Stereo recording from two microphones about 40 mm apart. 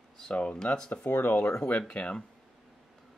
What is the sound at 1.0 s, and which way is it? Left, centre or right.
Speech, left.